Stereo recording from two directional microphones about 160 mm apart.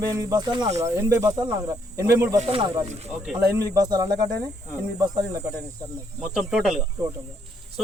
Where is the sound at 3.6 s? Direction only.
20° right (ahead or behind).